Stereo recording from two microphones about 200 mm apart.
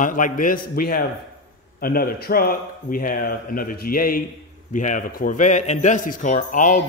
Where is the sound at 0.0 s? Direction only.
40° left (ahead or behind).